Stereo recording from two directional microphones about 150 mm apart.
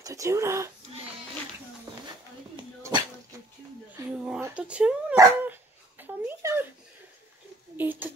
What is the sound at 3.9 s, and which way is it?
Speech, 5° right (ahead or behind).